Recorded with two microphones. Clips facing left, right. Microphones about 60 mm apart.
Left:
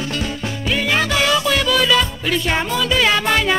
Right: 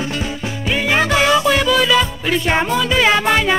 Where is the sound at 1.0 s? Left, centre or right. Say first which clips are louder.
Right 3 dB; right.